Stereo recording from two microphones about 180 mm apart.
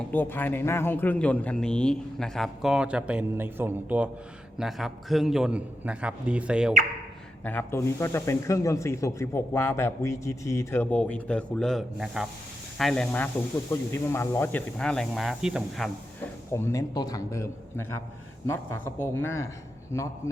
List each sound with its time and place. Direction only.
0.1 s speech: 10° left (ahead or behind); by 6.7 s 5° right (ahead or behind)
7.4 s speech: 10° left (ahead or behind)
16.5 s speech: 15° left (ahead or behind)